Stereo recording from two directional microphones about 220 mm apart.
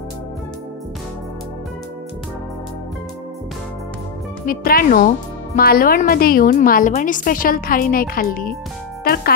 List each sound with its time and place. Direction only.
4.5 s a woman's voice: 40° left (ahead or behind)